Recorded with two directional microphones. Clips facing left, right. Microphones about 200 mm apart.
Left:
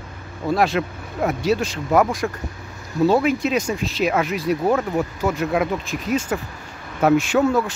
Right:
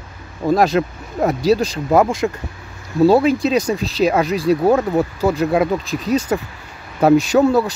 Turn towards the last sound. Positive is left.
turn(degrees=-35)  # may be behind; listen again after turning